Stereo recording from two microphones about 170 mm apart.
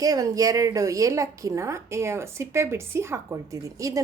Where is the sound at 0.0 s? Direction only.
20° right (ahead or behind).